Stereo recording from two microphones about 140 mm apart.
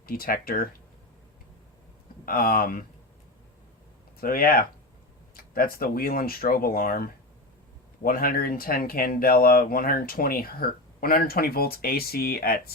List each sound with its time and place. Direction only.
0.0 s speech: 90° left
2.2 s speech: 90° left
4.2 s speech: 90° left